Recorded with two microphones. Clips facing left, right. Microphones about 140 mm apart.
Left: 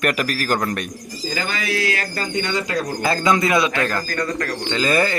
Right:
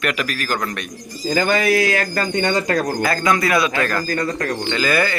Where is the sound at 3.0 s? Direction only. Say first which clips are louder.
Even; 25° left (ahead or behind).